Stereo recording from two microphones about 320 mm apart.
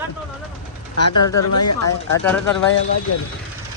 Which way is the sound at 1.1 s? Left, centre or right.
Left.